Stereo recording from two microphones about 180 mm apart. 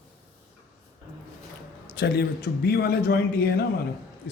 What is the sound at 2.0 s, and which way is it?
A man's voice, 65° left (ahead or behind).